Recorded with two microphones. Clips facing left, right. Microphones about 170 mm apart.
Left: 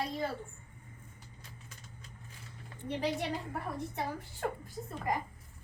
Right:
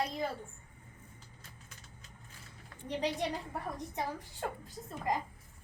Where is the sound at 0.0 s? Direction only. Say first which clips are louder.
Even; 20° right (ahead or behind).